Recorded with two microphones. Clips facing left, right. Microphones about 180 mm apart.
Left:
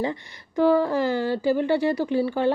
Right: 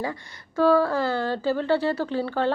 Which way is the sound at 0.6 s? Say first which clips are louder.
Even; 15° left (ahead or behind).